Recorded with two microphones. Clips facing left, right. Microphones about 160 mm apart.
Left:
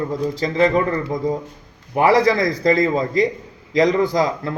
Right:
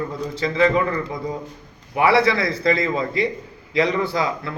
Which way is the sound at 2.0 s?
40° left (ahead or behind).